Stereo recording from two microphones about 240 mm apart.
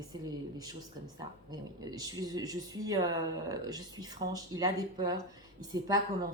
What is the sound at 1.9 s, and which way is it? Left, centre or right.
Speech, centre.